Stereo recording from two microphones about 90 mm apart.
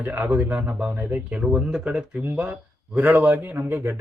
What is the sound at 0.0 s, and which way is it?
Speech, 20° right (ahead or behind).